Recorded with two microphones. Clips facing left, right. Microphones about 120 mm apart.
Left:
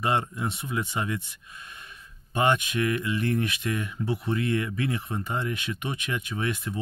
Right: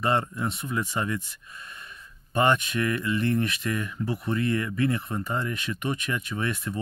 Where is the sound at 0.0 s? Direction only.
15° left (ahead or behind).